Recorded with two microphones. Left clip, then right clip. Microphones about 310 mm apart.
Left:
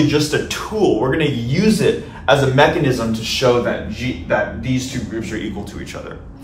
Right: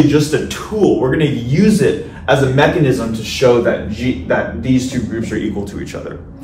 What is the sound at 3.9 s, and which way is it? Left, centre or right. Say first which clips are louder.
A man's voice: right 3 dB; centre.